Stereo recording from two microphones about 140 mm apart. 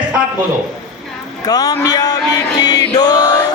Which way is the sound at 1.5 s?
25° left (ahead or behind).